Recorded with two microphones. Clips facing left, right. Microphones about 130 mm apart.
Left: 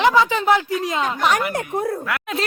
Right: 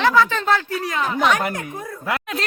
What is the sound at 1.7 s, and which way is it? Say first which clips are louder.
Speech: left 10 dB; 65° left (ahead or behind).